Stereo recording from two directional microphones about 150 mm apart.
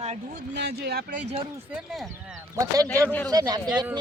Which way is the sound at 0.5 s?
90° right.